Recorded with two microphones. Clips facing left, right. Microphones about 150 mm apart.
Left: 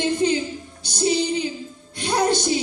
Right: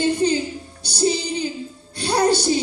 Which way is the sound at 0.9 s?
35° right (ahead or behind).